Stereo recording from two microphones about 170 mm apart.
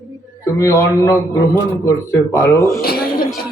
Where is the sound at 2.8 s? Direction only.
65° left (ahead or behind).